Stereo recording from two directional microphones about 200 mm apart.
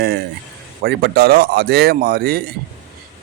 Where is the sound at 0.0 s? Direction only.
50° right (ahead or behind).